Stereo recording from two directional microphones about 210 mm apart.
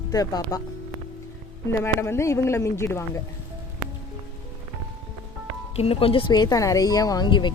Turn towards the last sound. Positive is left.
turn(degrees=20)  # may be behind; listen again after turning